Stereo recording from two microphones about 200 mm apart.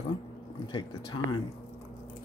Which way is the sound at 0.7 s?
25° left (ahead or behind).